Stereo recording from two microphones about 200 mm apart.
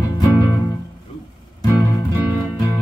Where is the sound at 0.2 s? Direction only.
20° left (ahead or behind).